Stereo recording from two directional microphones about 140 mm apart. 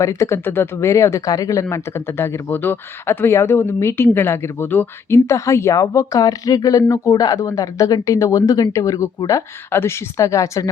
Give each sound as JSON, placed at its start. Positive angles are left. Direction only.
{"t": 0.0, "sound": "speech", "side_deg": 20}